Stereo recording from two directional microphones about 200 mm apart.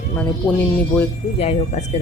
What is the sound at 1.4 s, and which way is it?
Speech, 30° left (ahead or behind).